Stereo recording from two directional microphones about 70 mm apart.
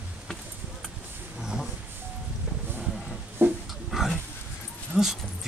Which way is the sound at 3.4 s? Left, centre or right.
Right.